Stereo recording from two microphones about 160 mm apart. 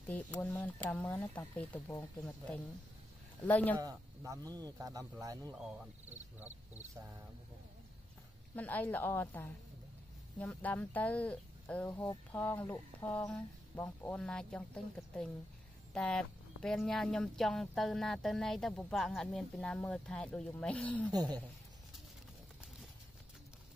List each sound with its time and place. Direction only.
0.1 s speech: 10° left (ahead or behind)
3.8 s speech: 20° right (ahead or behind)
8.5 s speech: 10° left (ahead or behind)
15.9 s speech: 5° left (ahead or behind)
21.1 s speech: 25° right (ahead or behind)